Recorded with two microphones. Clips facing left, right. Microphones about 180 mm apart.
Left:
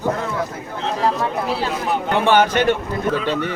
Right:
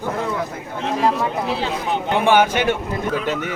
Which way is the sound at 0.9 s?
15° right (ahead or behind).